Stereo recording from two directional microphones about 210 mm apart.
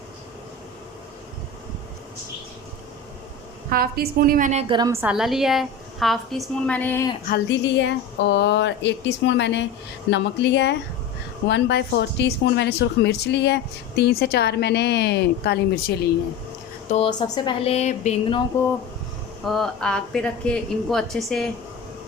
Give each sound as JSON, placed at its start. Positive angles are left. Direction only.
{"t": 3.7, "sound": "a woman's voice", "side_deg": -45}
{"t": 4.7, "sound": "a woman's voice", "side_deg": -15}
{"t": 7.3, "sound": "speech", "side_deg": 60}
{"t": 16.9, "sound": "speech", "side_deg": 25}
{"t": 19.5, "sound": "a woman's voice", "side_deg": 0}